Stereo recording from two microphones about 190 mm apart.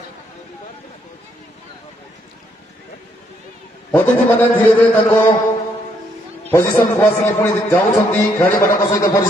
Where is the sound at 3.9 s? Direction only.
10° left (ahead or behind).